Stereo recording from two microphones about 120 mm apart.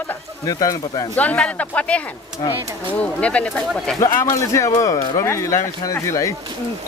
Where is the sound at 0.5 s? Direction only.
30° left (ahead or behind).